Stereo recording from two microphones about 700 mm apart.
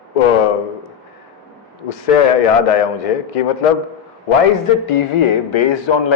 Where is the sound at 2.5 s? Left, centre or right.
Left.